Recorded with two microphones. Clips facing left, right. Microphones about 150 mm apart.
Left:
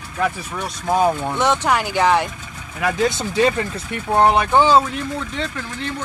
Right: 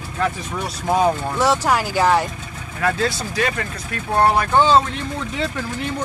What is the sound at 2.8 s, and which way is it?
Speech, 15° left (ahead or behind).